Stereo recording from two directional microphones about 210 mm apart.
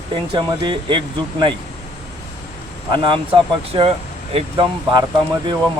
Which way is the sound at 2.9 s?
25° right (ahead or behind).